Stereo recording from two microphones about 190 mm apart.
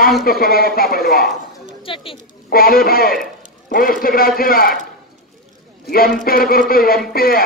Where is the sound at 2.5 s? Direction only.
50° left (ahead or behind).